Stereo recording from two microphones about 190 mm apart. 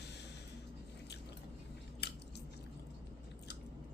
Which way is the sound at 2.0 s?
60° left (ahead or behind).